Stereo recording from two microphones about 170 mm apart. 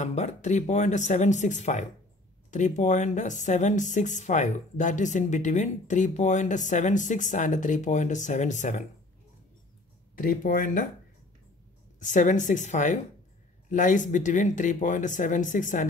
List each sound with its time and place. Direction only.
0.0 s speech: 45° left (ahead or behind)
10.1 s speech: 55° left (ahead or behind)
12.0 s speech: 45° left (ahead or behind)